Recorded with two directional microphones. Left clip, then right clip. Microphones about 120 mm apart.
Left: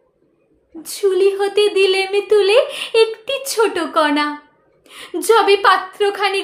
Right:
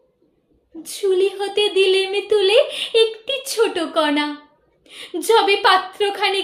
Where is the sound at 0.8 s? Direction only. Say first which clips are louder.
Left 3 dB; 30° left (ahead or behind).